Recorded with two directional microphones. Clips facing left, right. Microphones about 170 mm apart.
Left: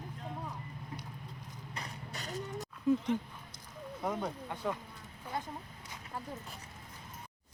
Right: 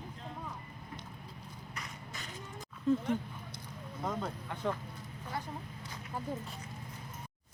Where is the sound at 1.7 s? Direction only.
35° left (ahead or behind).